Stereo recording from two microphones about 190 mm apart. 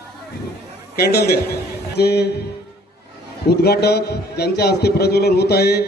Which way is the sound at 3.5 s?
55° left (ahead or behind).